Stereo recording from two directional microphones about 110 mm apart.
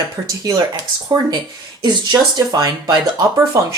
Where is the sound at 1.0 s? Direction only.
40° right (ahead or behind).